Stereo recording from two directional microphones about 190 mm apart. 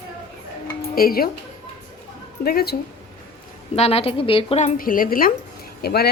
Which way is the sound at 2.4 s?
55° left (ahead or behind).